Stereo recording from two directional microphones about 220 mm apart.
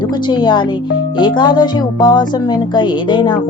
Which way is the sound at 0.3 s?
20° left (ahead or behind).